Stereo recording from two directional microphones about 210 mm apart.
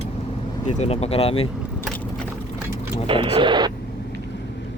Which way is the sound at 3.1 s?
25° right (ahead or behind).